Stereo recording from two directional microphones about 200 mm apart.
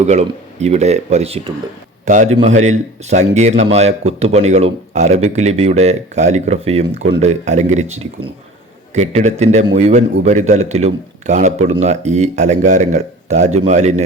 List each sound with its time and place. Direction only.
0.0 s speech: 35° right (ahead or behind)